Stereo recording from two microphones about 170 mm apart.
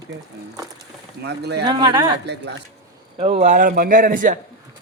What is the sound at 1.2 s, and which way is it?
Speech, 85° right.